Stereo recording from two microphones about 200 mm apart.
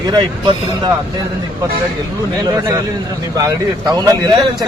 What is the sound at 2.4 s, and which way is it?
Speech, 20° right (ahead or behind).